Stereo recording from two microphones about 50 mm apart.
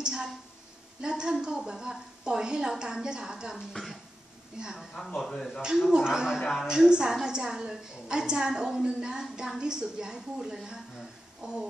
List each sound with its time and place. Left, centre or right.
0.0 s a sound: centre
1.0 s a woman's voice: centre
5.0 s speech: centre
5.6 s a woman's voice: centre